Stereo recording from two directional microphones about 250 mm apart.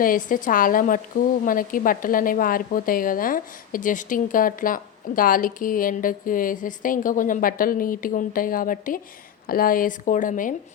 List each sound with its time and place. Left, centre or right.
0.0 s a woman's voice: left